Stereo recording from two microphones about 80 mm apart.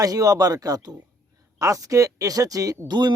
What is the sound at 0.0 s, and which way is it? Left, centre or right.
Speech, right.